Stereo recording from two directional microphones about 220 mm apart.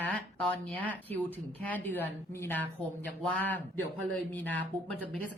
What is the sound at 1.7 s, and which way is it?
A woman's voice, 10° left (ahead or behind).